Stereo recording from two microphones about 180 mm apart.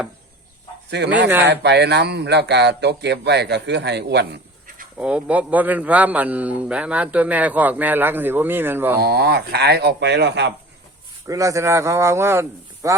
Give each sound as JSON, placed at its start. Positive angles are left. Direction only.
{"t": 0.9, "sound": "speech", "side_deg": -70}
{"t": 4.9, "sound": "a man's voice", "side_deg": -5}
{"t": 9.0, "sound": "speech", "side_deg": -60}
{"t": 11.3, "sound": "a man's voice", "side_deg": -15}